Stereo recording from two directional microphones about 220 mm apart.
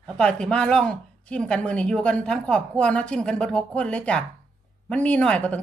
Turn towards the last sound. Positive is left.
turn(degrees=5)  # may be behind; listen again after turning